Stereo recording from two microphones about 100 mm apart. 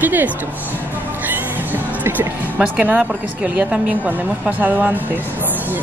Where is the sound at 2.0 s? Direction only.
15° right (ahead or behind).